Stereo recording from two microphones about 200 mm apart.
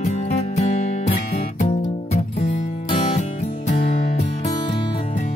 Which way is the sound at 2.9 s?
25° left (ahead or behind).